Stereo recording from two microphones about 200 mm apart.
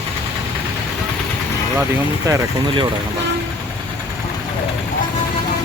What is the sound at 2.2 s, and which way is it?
Speech, 15° right (ahead or behind).